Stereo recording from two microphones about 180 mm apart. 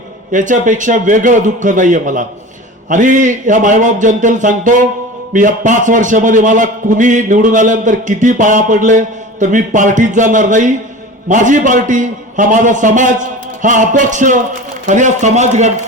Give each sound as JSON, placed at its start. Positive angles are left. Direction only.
{"t": 0.3, "sound": "a man's voice", "side_deg": -45}